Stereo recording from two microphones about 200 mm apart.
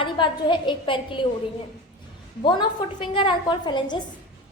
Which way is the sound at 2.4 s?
25° left (ahead or behind).